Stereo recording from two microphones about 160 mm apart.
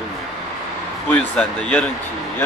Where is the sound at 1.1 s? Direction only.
10° left (ahead or behind).